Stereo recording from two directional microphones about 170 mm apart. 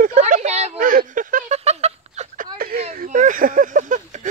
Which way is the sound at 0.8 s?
55° right (ahead or behind).